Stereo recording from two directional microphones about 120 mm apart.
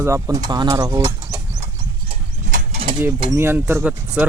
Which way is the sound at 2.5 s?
65° right (ahead or behind).